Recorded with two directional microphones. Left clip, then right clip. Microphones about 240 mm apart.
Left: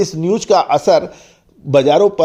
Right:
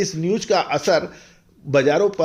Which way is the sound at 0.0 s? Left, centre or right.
Left.